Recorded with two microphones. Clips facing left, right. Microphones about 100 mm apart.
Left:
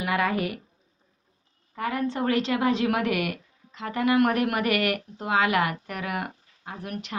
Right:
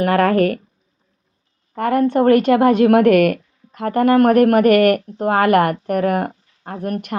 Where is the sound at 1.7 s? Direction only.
55° right (ahead or behind).